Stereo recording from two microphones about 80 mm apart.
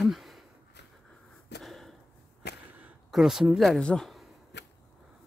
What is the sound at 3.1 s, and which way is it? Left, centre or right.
Speech, centre.